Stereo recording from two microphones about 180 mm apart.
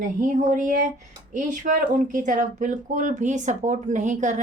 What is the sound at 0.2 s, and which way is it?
Speech, 45° right (ahead or behind).